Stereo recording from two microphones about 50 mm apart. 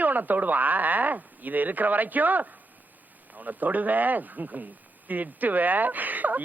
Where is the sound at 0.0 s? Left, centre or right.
Right.